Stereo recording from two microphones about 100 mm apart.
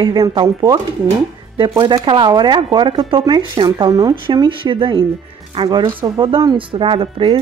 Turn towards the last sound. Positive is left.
turn(degrees=-65)  # may be behind; listen again after turning